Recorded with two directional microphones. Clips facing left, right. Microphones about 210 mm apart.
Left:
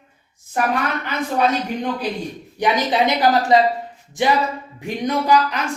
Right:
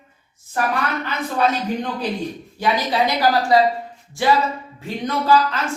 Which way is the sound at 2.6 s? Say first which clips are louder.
Left 2 dB; 20° left (ahead or behind).